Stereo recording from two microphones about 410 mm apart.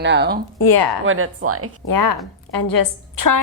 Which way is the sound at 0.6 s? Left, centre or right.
Left.